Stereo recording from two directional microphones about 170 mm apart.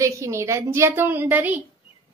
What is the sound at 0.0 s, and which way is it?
A woman's voice, 15° right (ahead or behind).